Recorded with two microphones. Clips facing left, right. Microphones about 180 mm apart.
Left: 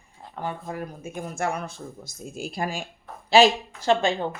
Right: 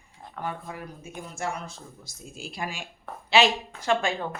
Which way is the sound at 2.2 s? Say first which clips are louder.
Left 5 dB; 45° left (ahead or behind).